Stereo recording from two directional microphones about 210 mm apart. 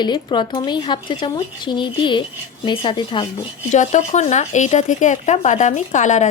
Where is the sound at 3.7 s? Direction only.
35° left (ahead or behind).